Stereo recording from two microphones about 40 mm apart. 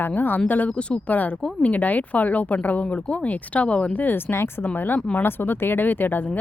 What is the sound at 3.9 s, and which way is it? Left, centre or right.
Speech, left.